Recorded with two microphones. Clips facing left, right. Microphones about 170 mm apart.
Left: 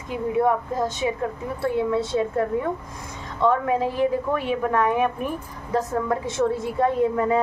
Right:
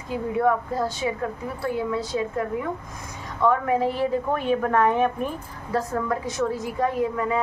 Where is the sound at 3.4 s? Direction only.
25° left (ahead or behind).